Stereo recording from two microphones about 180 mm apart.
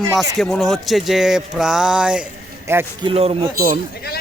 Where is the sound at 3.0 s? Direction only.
30° right (ahead or behind).